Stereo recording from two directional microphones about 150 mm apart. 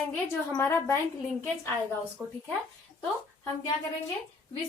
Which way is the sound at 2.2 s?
10° right (ahead or behind).